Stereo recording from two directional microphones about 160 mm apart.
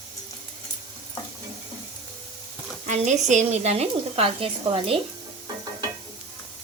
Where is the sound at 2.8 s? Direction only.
50° right (ahead or behind).